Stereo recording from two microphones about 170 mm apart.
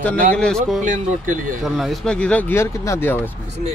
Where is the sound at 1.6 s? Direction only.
Centre (ahead or behind).